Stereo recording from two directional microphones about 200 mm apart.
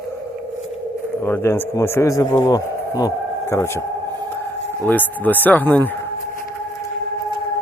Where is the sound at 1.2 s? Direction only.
15° left (ahead or behind).